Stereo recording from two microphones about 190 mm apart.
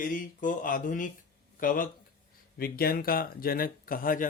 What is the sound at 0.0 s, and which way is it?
Speech, 45° left (ahead or behind).